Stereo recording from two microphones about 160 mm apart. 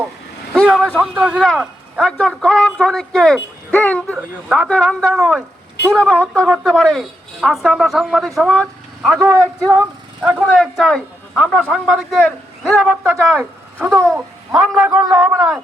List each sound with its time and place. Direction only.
0.5 s a man's voice: centre (ahead or behind)
6.5 s speech: 5° left (ahead or behind)
9.1 s a man's voice: 20° right (ahead or behind)
10.2 s speech: 5° right (ahead or behind)
13.1 s speech: 10° right (ahead or behind)
14.5 s speech: centre (ahead or behind)
14.8 s speech: 15° right (ahead or behind)
15.2 s speech: centre (ahead or behind)